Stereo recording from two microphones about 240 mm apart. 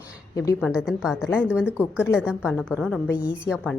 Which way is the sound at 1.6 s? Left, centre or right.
Centre.